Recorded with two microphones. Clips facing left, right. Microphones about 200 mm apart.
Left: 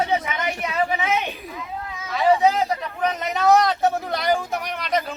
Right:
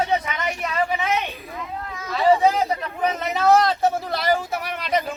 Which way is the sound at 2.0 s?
Centre (ahead or behind).